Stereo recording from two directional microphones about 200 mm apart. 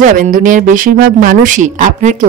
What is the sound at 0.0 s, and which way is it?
A woman's voice, 40° right (ahead or behind).